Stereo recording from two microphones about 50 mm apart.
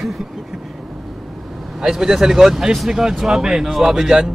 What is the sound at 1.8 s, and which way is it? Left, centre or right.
Speech, centre.